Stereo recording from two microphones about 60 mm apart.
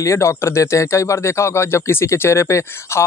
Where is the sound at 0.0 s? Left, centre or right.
Left.